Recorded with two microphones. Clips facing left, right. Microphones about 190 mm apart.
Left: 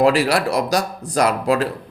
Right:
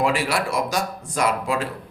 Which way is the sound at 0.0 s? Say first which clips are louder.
Left 6 dB; 35° left (ahead or behind).